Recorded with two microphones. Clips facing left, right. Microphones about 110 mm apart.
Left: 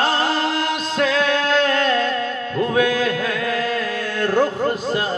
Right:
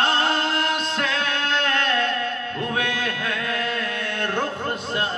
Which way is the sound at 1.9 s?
30° left (ahead or behind).